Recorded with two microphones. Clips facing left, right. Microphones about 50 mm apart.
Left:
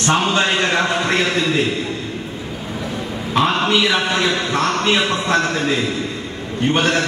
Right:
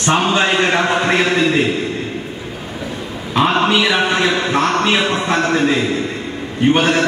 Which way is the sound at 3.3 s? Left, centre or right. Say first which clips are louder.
Right 2 dB; centre.